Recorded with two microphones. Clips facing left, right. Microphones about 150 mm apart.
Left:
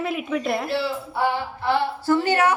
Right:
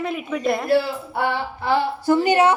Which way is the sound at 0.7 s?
55° right (ahead or behind).